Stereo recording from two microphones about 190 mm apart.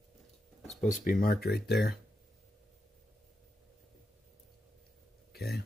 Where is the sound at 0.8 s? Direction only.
40° left (ahead or behind).